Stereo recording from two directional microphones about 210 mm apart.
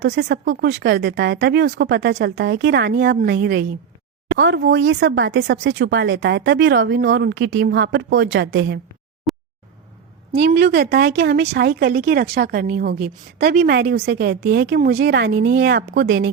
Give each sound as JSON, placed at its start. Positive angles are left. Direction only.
{"t": 0.0, "sound": "speech", "side_deg": -55}
{"t": 9.3, "sound": "a sound", "side_deg": 0}
{"t": 10.5, "sound": "speech", "side_deg": -50}